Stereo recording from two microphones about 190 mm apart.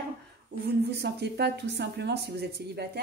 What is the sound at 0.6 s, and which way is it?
Speech, 60° right (ahead or behind).